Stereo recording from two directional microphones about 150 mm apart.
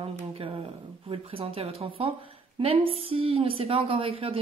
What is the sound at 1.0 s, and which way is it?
Speech, 40° right (ahead or behind).